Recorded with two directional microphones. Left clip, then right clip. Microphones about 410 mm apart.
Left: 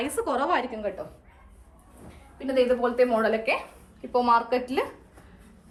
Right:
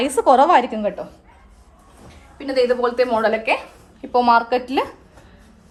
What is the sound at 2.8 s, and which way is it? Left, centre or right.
Speech, right.